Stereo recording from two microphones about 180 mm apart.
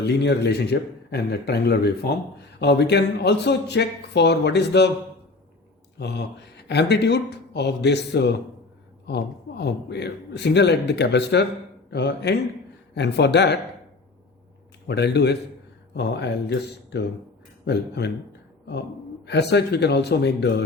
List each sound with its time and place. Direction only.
0.0 s a man's voice: 70° left (ahead or behind)
6.0 s a man's voice: 70° left (ahead or behind)
14.8 s a man's voice: 70° left (ahead or behind)
19.2 s a man's voice: 70° left (ahead or behind)